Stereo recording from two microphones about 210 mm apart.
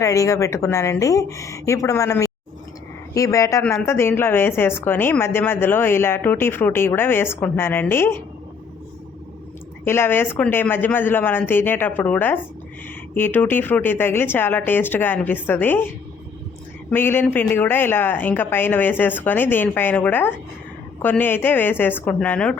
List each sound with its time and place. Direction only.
0.0 s a woman's voice: 15° left (ahead or behind)
9.8 s a woman's voice: 10° left (ahead or behind)
16.9 s a woman's voice: 10° left (ahead or behind)